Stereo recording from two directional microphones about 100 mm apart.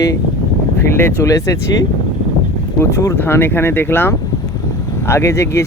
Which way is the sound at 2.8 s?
30° left (ahead or behind).